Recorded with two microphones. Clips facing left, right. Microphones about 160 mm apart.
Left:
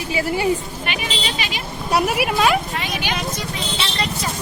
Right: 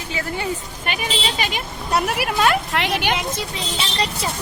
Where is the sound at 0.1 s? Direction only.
10° left (ahead or behind).